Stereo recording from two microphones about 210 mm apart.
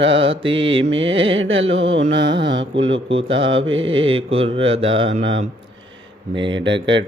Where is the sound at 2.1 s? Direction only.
55° right (ahead or behind).